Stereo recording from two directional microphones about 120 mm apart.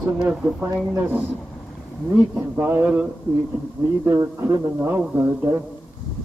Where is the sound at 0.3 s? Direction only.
10° right (ahead or behind).